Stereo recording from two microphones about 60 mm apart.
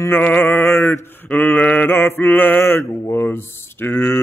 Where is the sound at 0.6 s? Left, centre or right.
Left.